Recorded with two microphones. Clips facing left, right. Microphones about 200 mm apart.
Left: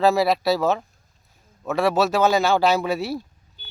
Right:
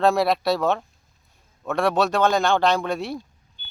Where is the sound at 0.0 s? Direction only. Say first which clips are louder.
Left 1 dB; centre (ahead or behind).